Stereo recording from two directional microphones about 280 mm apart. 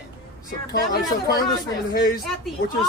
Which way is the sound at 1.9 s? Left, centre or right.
Left.